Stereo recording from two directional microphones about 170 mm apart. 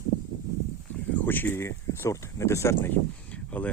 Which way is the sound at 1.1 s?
10° left (ahead or behind).